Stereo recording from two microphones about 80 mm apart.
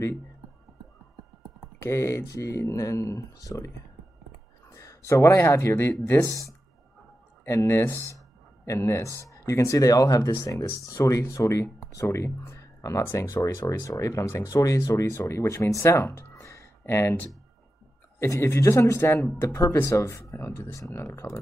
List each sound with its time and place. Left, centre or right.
1.8 s speech: left
7.4 s speech: left